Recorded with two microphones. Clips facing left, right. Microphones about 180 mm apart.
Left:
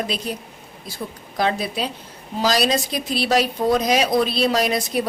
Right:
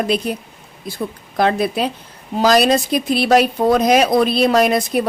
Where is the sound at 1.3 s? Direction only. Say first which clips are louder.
Right 5 dB; 55° right (ahead or behind).